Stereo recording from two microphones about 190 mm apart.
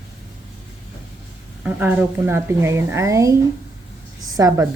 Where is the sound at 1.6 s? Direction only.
10° right (ahead or behind).